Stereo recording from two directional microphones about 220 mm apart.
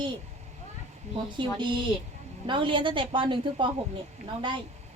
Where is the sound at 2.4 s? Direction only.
20° right (ahead or behind).